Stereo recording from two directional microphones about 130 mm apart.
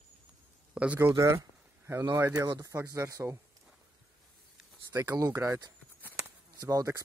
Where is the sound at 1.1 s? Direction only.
25° right (ahead or behind).